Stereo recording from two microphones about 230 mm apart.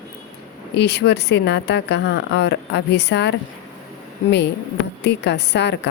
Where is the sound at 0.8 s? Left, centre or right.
Left.